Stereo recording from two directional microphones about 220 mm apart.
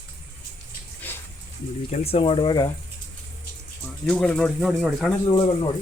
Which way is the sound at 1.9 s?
25° left (ahead or behind).